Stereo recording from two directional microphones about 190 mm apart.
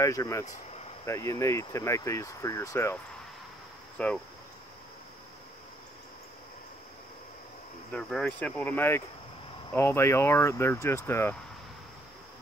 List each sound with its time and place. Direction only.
0.0 s speech: 15° left (ahead or behind)
4.0 s speech: 5° left (ahead or behind)
7.9 s speech: 5° left (ahead or behind)